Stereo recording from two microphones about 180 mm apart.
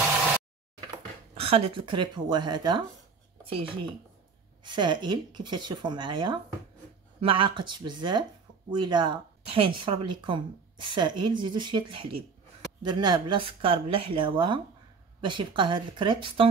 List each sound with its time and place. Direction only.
1.3 s speech: 30° right (ahead or behind)